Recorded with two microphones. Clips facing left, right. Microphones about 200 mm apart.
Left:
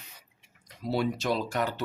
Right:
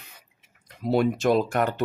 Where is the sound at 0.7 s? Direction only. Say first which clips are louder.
Right 6 dB; 55° right (ahead or behind).